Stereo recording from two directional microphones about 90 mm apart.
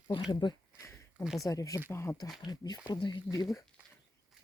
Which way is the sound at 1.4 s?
40° left (ahead or behind).